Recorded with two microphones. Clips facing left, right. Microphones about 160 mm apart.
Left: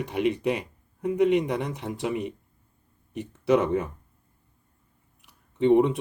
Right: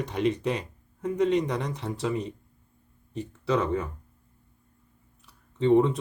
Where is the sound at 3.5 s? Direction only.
20° left (ahead or behind).